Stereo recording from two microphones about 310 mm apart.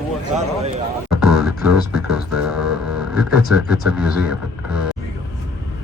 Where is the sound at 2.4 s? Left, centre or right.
Centre.